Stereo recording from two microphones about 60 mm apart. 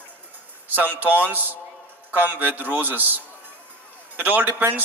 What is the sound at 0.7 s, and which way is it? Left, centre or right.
A man's voice, right.